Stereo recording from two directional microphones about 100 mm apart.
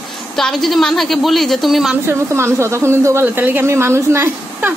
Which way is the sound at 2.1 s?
25° right (ahead or behind).